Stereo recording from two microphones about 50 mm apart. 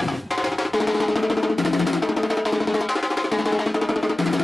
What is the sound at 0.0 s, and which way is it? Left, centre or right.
Percussion, centre.